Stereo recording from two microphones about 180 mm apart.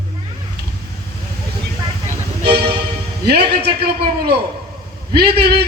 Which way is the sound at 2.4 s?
65° right (ahead or behind).